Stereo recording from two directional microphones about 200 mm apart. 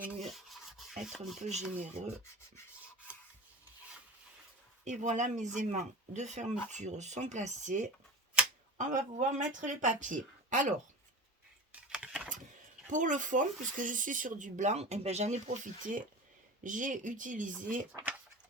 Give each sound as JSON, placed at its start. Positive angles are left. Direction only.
{"t": 0.3, "sound": "rub", "side_deg": 0}
{"t": 1.8, "sound": "speech", "side_deg": -35}
{"t": 4.9, "sound": "speech", "side_deg": -35}
{"t": 11.7, "sound": "typing", "side_deg": -5}
{"t": 12.9, "sound": "speech", "side_deg": -40}
{"t": 17.9, "sound": "speech", "side_deg": -10}